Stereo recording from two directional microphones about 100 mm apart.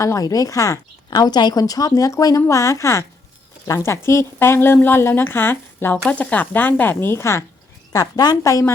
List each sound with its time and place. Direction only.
0.0 s speech: 35° left (ahead or behind)
1.1 s a woman's voice: 45° left (ahead or behind); by 7.4 s 25° left (ahead or behind)
7.9 s speech: 40° left (ahead or behind)